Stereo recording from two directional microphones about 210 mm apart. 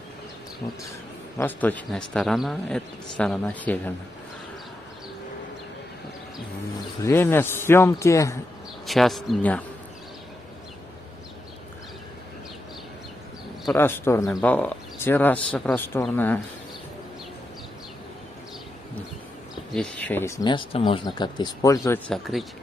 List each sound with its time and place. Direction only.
1.4 s a man's voice: 10° left (ahead or behind)
7.1 s speech: 10° left (ahead or behind)
8.8 s a man's voice: centre (ahead or behind)
13.7 s speech: 10° left (ahead or behind)
19.7 s speech: 5° left (ahead or behind)
20.4 s speech: 25° left (ahead or behind); by 22.5 s centre (ahead or behind)